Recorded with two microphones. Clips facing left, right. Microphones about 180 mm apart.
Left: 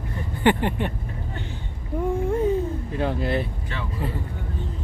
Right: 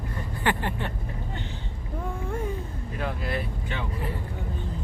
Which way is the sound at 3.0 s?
25° left (ahead or behind).